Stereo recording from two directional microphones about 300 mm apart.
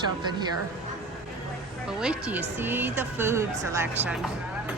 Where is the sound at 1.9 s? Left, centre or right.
Centre.